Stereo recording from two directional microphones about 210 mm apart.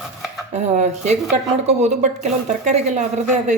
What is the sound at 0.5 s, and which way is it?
Speech, 35° right (ahead or behind).